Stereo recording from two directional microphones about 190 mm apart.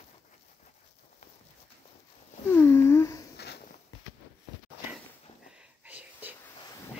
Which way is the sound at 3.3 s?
60° left (ahead or behind).